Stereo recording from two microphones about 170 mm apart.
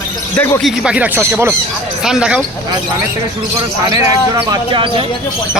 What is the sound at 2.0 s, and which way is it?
Speech, 5° right (ahead or behind).